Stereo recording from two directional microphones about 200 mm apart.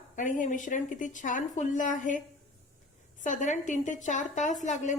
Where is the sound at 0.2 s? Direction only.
40° left (ahead or behind).